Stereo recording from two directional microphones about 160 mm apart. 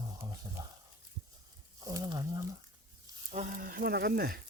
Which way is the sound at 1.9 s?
25° right (ahead or behind).